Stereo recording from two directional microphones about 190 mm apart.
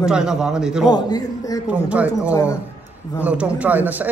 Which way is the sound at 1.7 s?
5° right (ahead or behind).